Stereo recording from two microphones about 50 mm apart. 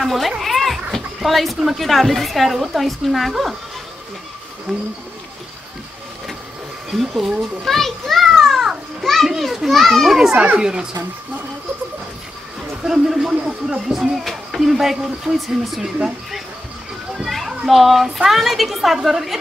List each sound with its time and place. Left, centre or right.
0.0 s speech: centre
0.4 s a sound: centre
0.9 s speech: centre
4.7 s speech: centre
6.9 s speech: centre
7.6 s children playing: centre
9.4 s speech: centre
10.3 s speech: right
12.8 s speech: centre
17.2 s a child's voice: centre